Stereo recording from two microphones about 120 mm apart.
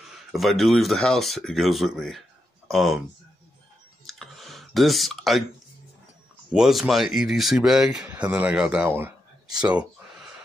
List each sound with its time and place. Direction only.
0.1 s speech: centre (ahead or behind)
4.0 s clicking: centre (ahead or behind)
6.5 s speech: 5° right (ahead or behind)
9.5 s speech: 35° right (ahead or behind)
9.8 s a sound: 5° right (ahead or behind)